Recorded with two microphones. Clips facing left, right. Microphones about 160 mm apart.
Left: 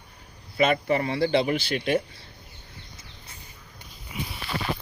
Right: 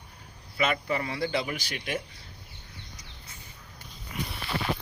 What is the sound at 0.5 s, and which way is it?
Speech, 30° left (ahead or behind).